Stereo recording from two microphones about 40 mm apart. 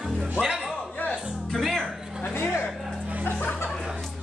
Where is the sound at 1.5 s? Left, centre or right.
Centre.